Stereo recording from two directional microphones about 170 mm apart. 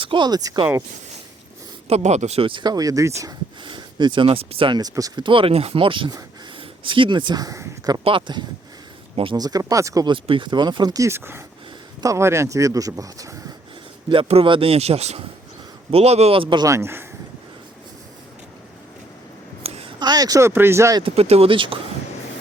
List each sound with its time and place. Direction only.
0.0 s speech: 30° right (ahead or behind)
1.9 s speech: 40° right (ahead or behind); by 13.3 s 20° right (ahead or behind)
14.1 s speech: 35° right (ahead or behind); by 17.1 s 15° right (ahead or behind)
19.6 s speech: 35° right (ahead or behind); by 21.0 s 15° right (ahead or behind)
21.0 s speech: 35° right (ahead or behind)